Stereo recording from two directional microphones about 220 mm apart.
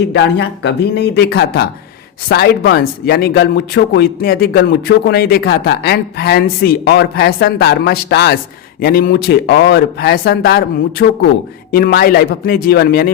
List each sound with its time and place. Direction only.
0.1 s a man's voice: 50° left (ahead or behind)